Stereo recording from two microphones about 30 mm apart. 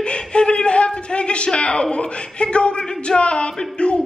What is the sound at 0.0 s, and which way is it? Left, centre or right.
A man's voice, left.